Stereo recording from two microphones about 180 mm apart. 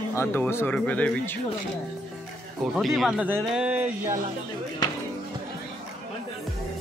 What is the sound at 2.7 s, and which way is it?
A man's voice, centre (ahead or behind).